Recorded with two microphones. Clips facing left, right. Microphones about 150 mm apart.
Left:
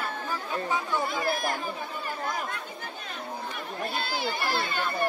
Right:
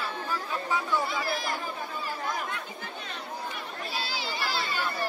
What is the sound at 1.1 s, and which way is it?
Speech, 50° left (ahead or behind).